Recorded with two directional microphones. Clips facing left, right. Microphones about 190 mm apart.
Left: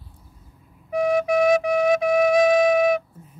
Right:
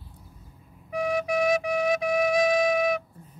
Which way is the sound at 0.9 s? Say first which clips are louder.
Left 6 dB; 50° left (ahead or behind).